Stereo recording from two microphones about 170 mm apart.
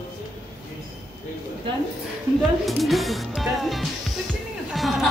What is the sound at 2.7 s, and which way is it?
Music, centre (ahead or behind).